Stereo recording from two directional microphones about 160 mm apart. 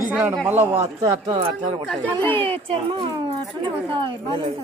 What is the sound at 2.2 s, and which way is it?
Speech, 10° left (ahead or behind).